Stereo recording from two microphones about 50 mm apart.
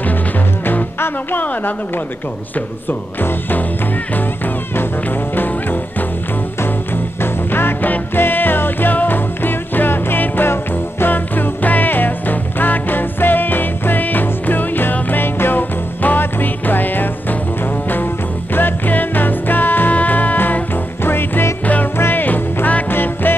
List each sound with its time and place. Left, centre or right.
0.7 s music: left
1.4 s speech: left
2.9 s speech: left
5.3 s music: left
7.2 s music: left